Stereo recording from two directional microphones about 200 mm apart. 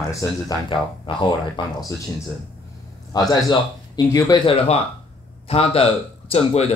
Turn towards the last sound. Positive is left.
turn(degrees=30)  # may be behind; listen again after turning